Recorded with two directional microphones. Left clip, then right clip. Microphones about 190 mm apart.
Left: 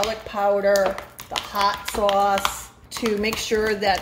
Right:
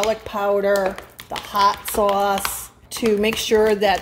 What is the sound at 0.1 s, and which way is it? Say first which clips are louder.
Speech: right 1 dB; 45° right (ahead or behind).